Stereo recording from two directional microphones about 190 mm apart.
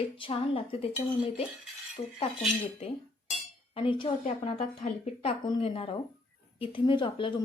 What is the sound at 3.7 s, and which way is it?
Speech, 30° left (ahead or behind).